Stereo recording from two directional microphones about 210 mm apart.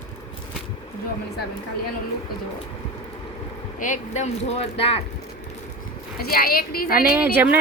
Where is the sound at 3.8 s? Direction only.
35° left (ahead or behind).